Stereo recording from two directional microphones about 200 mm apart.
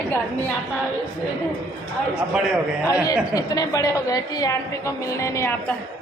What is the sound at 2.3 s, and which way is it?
Speech, centre (ahead or behind).